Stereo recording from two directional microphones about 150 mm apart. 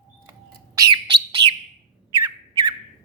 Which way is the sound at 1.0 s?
35° right (ahead or behind).